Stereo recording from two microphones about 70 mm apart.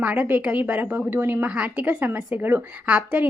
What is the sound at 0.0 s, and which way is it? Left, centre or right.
A woman's voice, right.